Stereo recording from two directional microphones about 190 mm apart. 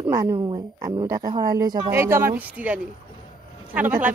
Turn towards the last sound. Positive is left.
turn(degrees=-10)  # may be behind; listen again after turning